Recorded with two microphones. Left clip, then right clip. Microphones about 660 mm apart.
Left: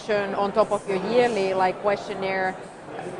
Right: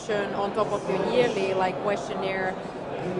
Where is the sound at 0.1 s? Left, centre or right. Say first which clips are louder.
Left 3 dB; left.